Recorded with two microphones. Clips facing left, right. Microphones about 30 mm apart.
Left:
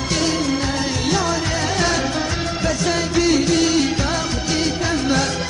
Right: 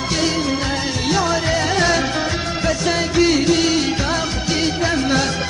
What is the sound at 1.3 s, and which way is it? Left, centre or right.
Music, centre.